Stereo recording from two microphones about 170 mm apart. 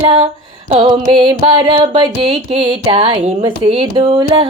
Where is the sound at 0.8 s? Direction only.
30° right (ahead or behind).